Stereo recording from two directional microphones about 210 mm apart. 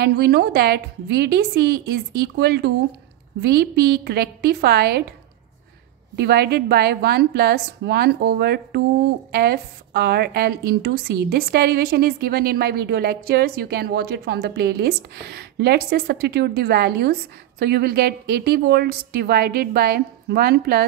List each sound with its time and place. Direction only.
0.0 s a woman's voice: 50° right (ahead or behind)
6.1 s a woman's voice: 50° right (ahead or behind)